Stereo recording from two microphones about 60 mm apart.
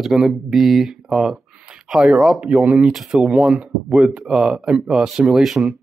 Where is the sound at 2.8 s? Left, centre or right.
Centre.